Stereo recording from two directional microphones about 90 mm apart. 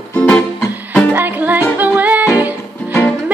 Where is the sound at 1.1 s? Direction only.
20° right (ahead or behind).